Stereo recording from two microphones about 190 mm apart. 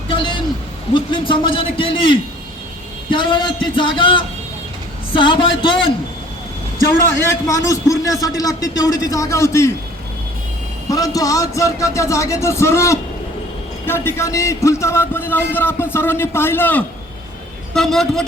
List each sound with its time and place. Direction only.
0.1 s a sound: 25° left (ahead or behind)
0.9 s a man's voice: 25° left (ahead or behind)
7.3 s a man's voice: 15° left (ahead or behind)
10.8 s a man's voice: 20° left (ahead or behind); by 18.3 s centre (ahead or behind)